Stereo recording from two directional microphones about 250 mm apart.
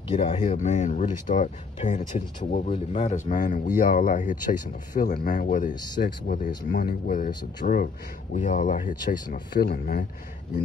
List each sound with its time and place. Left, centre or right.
0.1 s speech: left